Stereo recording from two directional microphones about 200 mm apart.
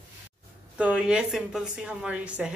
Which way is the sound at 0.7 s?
5° right (ahead or behind).